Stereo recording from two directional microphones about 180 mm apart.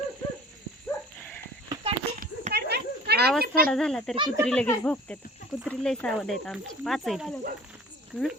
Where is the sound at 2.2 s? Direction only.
55° right (ahead or behind).